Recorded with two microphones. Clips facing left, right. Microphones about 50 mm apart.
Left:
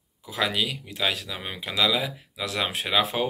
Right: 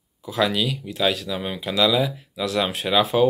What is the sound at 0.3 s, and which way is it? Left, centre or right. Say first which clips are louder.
Speech: right 4 dB; left.